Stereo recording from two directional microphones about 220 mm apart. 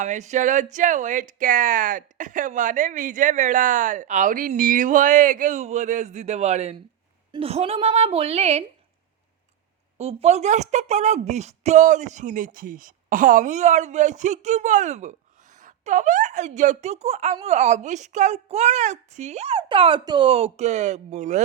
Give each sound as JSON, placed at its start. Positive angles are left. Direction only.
{"t": 0.0, "sound": "a woman's voice", "side_deg": -35}
{"t": 10.0, "sound": "speech", "side_deg": -30}